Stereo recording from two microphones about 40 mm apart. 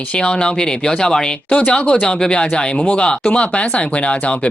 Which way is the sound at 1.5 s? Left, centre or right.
Left.